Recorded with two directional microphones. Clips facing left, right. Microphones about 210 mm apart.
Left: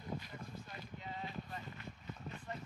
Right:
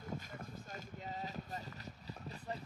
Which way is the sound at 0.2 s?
45° right (ahead or behind).